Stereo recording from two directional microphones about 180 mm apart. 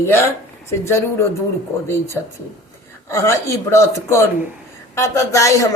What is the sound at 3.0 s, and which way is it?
A man's voice, 15° left (ahead or behind).